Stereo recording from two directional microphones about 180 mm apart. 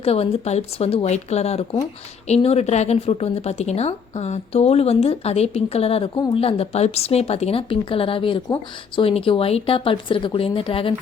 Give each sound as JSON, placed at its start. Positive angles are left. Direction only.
{"t": 0.0, "sound": "speech", "side_deg": 35}